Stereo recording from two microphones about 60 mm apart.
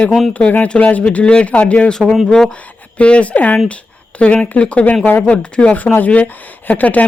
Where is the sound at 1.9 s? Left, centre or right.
Centre.